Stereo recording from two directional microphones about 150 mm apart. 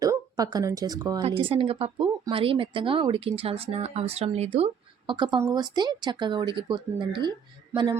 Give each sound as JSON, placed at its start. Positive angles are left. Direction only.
{"t": 0.0, "sound": "speech", "side_deg": -25}
{"t": 1.2, "sound": "speech", "side_deg": -35}
{"t": 5.1, "sound": "speech", "side_deg": -30}